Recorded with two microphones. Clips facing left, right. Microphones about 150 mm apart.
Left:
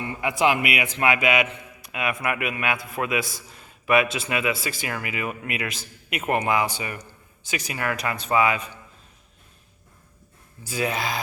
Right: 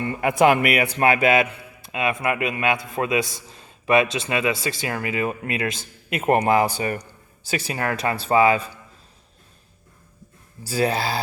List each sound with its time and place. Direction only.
0.0 s speech: 50° right (ahead or behind); by 1.5 s 35° right (ahead or behind)
1.8 s a sound: 25° right (ahead or behind)
2.2 s a man's voice: 25° right (ahead or behind)
10.7 s a man's voice: 35° right (ahead or behind)